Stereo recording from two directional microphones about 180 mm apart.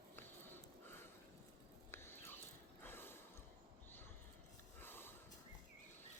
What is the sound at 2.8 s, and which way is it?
Gasp, 10° left (ahead or behind).